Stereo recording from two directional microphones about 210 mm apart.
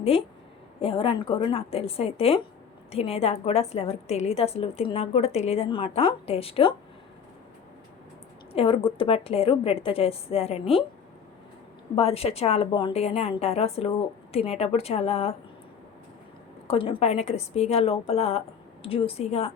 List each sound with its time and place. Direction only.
0.8 s a woman's voice: 25° left (ahead or behind)
8.5 s a woman's voice: 25° left (ahead or behind)
11.9 s a woman's voice: 30° left (ahead or behind)
16.6 s a woman's voice: 25° left (ahead or behind)